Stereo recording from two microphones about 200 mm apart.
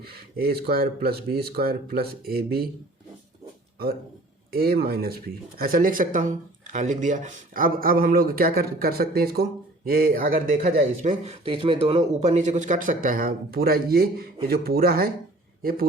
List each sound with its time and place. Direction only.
0.0 s a man's voice: 50° right (ahead or behind)
4.5 s a man's voice: 50° right (ahead or behind)
10.8 s a man's voice: 30° right (ahead or behind); by 15.1 s 50° right (ahead or behind)